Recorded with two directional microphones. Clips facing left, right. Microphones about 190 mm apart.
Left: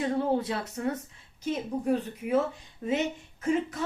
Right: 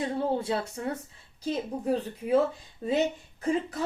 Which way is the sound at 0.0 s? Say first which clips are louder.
Left 2 dB; 30° right (ahead or behind).